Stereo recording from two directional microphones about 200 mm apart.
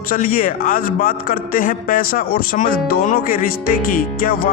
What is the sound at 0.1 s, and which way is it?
Speech, 45° left (ahead or behind).